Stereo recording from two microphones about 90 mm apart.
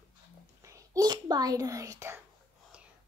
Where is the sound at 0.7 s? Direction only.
45° right (ahead or behind).